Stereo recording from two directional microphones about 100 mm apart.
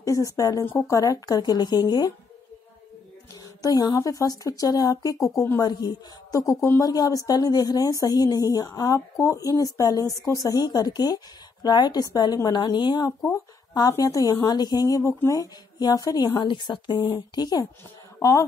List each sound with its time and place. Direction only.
0.0 s speech: 35° left (ahead or behind)
3.6 s a woman's voice: 40° left (ahead or behind)
18.2 s speech: 30° left (ahead or behind)